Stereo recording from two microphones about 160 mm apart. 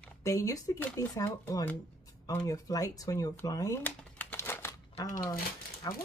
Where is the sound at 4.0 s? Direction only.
10° left (ahead or behind).